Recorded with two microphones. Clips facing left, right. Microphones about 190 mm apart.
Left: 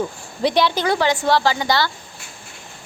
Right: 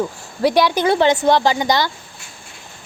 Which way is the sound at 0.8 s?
20° right (ahead or behind).